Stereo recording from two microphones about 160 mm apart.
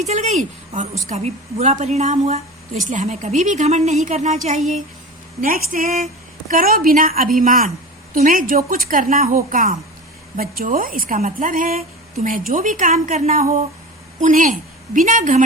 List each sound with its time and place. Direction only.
0.0 s speech: 45° right (ahead or behind)
5.4 s a woman's voice: 60° right (ahead or behind)